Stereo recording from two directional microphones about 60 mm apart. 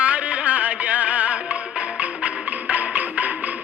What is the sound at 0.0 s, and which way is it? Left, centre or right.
Music, right.